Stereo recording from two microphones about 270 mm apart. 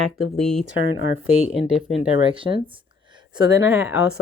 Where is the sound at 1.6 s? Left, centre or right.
Centre.